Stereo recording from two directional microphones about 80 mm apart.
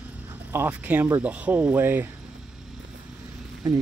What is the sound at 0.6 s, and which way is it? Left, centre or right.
Speech, centre.